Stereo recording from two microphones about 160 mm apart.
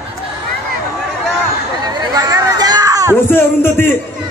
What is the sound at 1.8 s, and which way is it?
Chatter, 25° right (ahead or behind).